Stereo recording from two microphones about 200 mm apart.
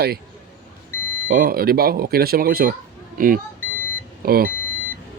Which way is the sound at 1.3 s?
45° right (ahead or behind).